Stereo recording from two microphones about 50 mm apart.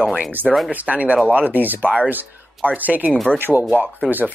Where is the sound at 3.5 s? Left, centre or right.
Centre.